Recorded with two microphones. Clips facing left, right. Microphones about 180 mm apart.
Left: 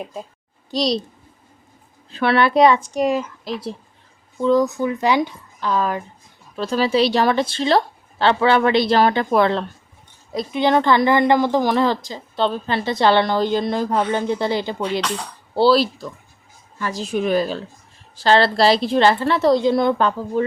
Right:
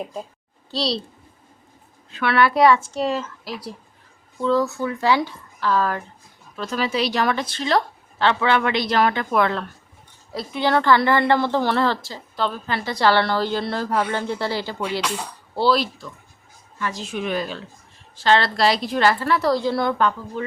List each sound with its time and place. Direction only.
0.0 s a child's voice: centre (ahead or behind)
0.7 s a woman's voice: 15° left (ahead or behind)
2.0 s a woman's voice: 30° left (ahead or behind); by 6.1 s 15° left (ahead or behind)
6.6 s a woman's voice: 30° left (ahead or behind)
10.3 s a woman's voice: 20° left (ahead or behind)
15.0 s speech: 10° right (ahead or behind)
15.5 s a woman's voice: 30° left (ahead or behind)
20.0 s a woman's voice: 30° left (ahead or behind)